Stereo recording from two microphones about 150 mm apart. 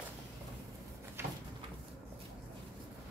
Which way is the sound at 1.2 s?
15° right (ahead or behind).